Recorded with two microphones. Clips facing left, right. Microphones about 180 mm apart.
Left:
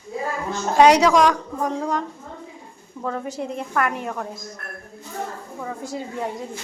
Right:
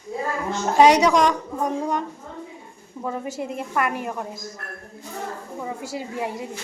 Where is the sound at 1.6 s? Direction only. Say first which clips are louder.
Even; 20° right (ahead or behind).